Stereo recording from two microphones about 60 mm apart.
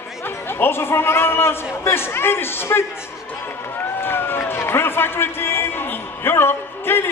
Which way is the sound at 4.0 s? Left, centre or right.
Left.